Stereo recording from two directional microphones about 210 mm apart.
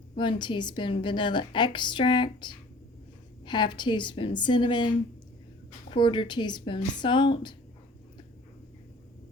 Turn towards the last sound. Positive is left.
turn(degrees=20)  # may be behind; listen again after turning